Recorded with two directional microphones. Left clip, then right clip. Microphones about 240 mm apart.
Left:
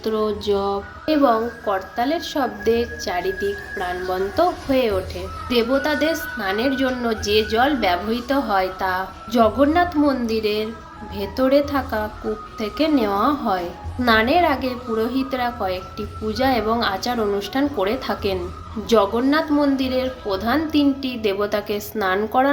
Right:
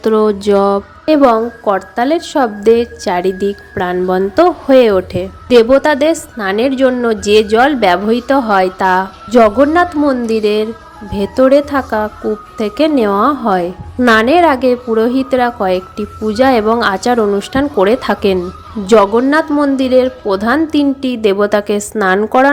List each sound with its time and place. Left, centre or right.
0.0 s speech: right